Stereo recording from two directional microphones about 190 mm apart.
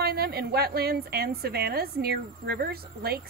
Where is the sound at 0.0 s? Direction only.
55° right (ahead or behind).